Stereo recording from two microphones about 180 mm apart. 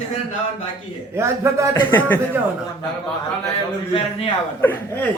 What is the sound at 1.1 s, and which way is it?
Speech, 15° right (ahead or behind).